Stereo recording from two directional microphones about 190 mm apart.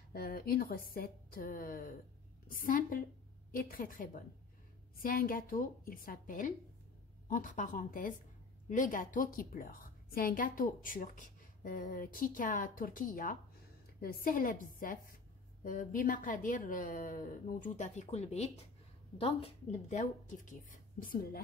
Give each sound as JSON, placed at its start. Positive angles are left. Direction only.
{"t": 0.1, "sound": "a woman's voice", "side_deg": 55}